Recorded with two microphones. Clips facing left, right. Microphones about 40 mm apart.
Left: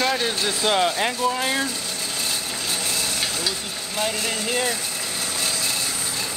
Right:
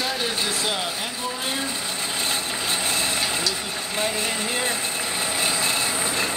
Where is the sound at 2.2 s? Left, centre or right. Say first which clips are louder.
Right 2 dB; right.